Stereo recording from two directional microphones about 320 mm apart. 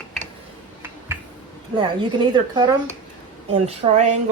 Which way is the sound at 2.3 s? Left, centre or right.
Centre.